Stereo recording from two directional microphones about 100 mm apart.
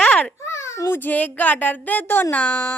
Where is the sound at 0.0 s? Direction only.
10° left (ahead or behind).